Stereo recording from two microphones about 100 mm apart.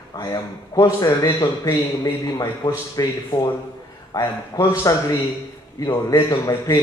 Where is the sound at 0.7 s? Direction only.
35° left (ahead or behind).